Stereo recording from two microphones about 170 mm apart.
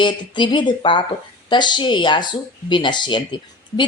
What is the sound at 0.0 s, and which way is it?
Speech, 25° left (ahead or behind).